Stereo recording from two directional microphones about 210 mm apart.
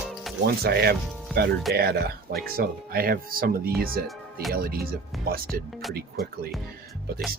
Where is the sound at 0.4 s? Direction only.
50° right (ahead or behind).